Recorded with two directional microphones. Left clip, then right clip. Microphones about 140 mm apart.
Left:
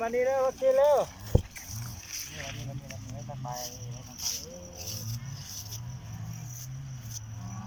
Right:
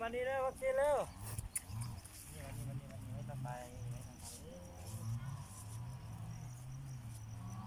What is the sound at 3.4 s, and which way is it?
Speech, 35° left (ahead or behind).